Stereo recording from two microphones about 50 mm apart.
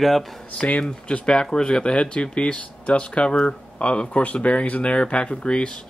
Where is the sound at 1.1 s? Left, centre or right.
Centre.